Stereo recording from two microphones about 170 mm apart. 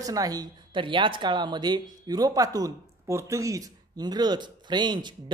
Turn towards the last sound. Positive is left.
turn(degrees=-25)  # may be behind; listen again after turning